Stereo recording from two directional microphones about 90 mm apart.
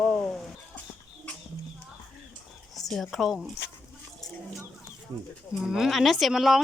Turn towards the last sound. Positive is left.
turn(degrees=0)  # may be behind; listen again after turning